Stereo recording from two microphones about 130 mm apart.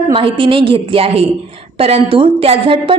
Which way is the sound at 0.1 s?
40° right (ahead or behind).